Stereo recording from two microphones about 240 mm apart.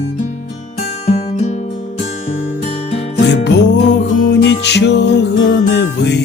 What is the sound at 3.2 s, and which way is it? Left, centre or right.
Music, left.